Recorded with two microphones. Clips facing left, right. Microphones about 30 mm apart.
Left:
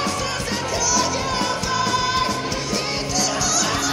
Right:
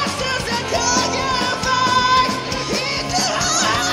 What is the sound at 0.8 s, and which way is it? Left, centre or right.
Music, centre.